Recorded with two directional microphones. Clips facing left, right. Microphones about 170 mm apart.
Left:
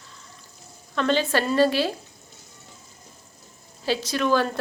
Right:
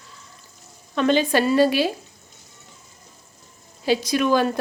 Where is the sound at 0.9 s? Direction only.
15° right (ahead or behind).